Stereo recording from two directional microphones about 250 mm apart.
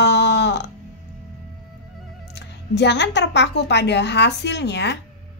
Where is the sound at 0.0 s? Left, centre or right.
Left.